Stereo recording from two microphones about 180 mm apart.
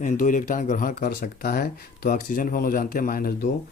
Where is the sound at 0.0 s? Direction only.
45° left (ahead or behind).